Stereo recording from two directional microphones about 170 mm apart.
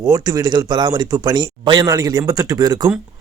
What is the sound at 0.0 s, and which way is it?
Speech, 20° right (ahead or behind).